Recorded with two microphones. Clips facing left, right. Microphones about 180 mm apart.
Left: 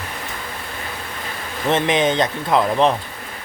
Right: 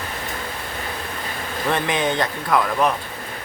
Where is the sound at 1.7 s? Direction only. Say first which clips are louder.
Left 5 dB; 20° left (ahead or behind).